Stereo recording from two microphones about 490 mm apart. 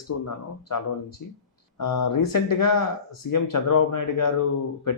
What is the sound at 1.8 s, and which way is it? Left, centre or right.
A man's voice, left.